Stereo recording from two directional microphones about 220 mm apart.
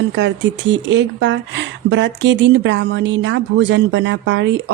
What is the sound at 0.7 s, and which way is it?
A woman's voice, 55° right (ahead or behind).